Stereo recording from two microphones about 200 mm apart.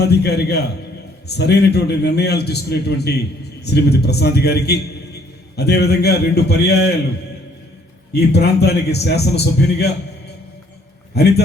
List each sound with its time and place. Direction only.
0.0 s a man's voice: 55° left (ahead or behind)
8.1 s a man's voice: 55° left (ahead or behind)
11.1 s a man's voice: 55° left (ahead or behind)